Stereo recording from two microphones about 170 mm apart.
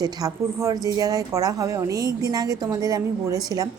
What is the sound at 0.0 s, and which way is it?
A woman's voice, 20° right (ahead or behind).